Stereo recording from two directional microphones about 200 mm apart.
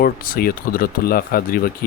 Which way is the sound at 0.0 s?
45° left (ahead or behind).